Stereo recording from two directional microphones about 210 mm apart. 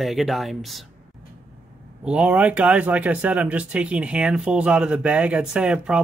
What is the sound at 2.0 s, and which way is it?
Speech, 5° right (ahead or behind).